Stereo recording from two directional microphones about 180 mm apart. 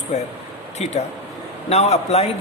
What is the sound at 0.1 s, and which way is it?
Speech, 40° left (ahead or behind).